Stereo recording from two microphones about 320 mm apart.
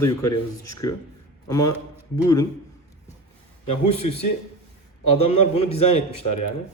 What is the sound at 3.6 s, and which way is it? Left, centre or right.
Speech, left.